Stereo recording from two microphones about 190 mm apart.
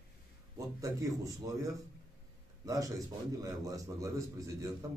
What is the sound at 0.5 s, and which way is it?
A man's voice, 15° right (ahead or behind).